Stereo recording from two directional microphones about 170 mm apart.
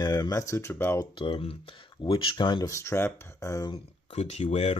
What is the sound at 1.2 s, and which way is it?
Speech, 30° left (ahead or behind).